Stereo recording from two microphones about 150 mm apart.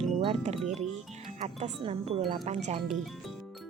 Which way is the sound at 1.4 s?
50° right (ahead or behind).